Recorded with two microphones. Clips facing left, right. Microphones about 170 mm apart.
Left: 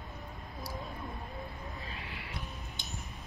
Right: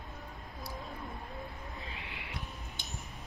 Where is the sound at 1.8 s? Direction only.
20° right (ahead or behind).